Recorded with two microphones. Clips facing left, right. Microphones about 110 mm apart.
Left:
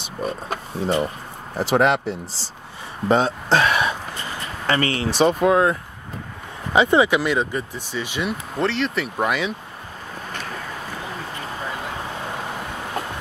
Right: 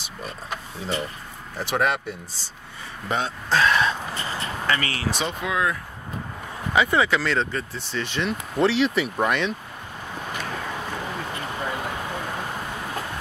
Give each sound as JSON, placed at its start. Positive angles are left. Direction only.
{"t": 0.2, "sound": "speech", "side_deg": 50}
{"t": 1.6, "sound": "speech", "side_deg": 30}
{"t": 3.5, "sound": "a sound", "side_deg": 10}
{"t": 4.6, "sound": "speech", "side_deg": 30}
{"t": 5.2, "sound": "speech", "side_deg": 45}
{"t": 6.7, "sound": "speech", "side_deg": 20}